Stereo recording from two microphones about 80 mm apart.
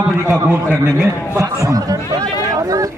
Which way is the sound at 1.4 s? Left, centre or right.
Right.